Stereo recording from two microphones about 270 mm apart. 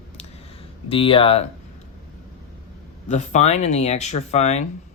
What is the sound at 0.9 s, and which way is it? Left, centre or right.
Speech, centre.